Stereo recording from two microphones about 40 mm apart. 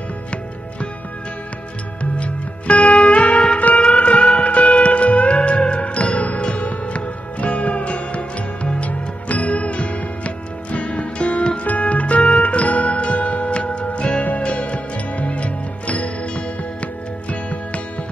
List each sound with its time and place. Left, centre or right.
2.1 s music: left